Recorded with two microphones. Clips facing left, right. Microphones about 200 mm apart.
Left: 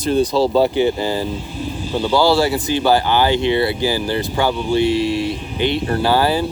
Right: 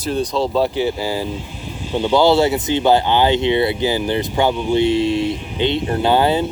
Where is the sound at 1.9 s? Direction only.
20° right (ahead or behind).